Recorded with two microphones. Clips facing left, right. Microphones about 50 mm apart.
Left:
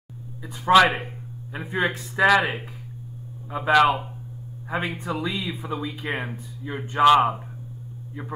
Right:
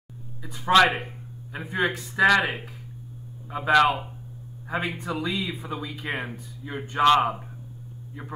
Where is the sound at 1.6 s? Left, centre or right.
Centre.